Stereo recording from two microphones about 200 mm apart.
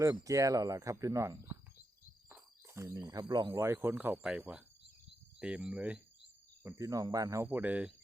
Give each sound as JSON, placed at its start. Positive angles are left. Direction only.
{"t": 0.0, "sound": "speech", "side_deg": -15}